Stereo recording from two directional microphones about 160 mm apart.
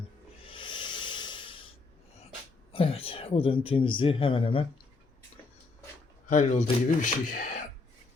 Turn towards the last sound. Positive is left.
turn(degrees=55)  # may be behind; listen again after turning